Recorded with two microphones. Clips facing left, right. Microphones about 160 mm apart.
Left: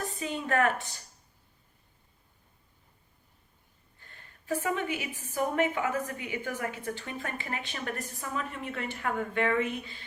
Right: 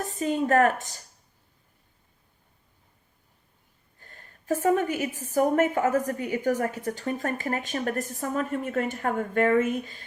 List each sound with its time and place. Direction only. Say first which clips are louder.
0.0 s a woman's voice: right 8 dB; 40° right (ahead or behind)
4.0 s a woman's voice: right 9 dB; 40° right (ahead or behind)